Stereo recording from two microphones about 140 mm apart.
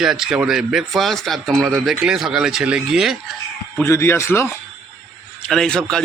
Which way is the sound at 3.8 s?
20° left (ahead or behind).